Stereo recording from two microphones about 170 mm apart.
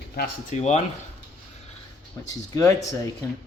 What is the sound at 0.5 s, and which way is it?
Speech, 45° left (ahead or behind).